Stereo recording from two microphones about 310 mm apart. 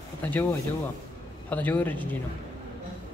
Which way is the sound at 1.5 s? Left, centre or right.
Centre.